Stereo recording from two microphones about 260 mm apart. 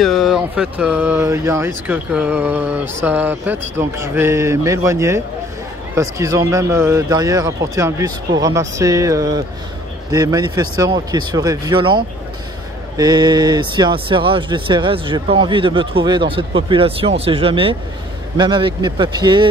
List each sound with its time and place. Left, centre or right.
0.0 s speech: centre